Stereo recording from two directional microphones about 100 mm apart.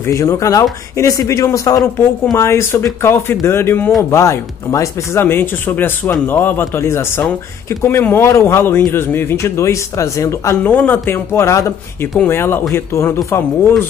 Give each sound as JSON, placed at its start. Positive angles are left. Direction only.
{"t": 0.0, "sound": "a man's voice", "side_deg": 30}
{"t": 10.6, "sound": "a man's voice", "side_deg": 15}